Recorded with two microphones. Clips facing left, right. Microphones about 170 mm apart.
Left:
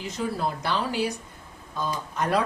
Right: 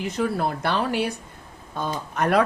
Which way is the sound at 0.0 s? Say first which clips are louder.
Right 4 dB; 60° right (ahead or behind).